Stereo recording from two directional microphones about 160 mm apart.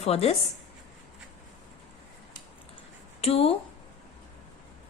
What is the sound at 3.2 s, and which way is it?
Speech, 40° left (ahead or behind).